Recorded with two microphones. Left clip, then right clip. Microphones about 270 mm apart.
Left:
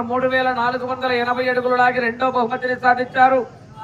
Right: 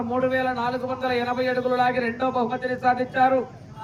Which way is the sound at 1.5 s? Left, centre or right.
Left.